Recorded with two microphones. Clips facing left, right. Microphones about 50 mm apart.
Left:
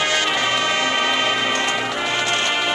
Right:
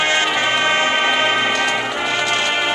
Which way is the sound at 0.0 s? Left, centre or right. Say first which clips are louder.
Right 3 dB; right.